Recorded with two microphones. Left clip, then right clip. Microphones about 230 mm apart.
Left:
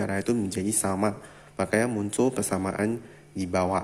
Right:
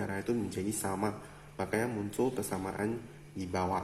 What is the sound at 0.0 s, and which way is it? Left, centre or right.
Speech, left.